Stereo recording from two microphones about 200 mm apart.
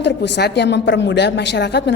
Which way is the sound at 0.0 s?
60° left (ahead or behind).